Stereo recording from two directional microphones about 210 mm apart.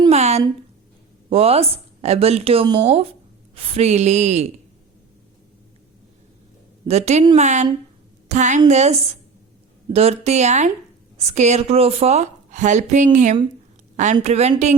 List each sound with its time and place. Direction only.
0.0 s a sound: 30° right (ahead or behind)
1.3 s speech: 30° right (ahead or behind)
6.8 s a woman's voice: 30° right (ahead or behind)